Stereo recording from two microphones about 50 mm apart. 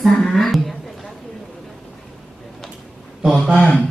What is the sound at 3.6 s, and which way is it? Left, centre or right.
Speech, left.